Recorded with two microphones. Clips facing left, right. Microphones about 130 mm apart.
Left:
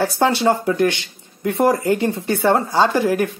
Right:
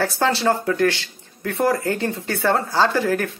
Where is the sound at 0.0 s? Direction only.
15° left (ahead or behind).